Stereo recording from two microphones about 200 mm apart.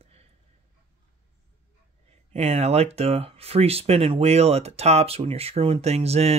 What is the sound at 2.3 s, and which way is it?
Speech, 30° right (ahead or behind).